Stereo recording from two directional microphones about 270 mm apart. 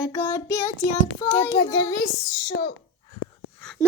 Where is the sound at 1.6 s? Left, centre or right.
Centre.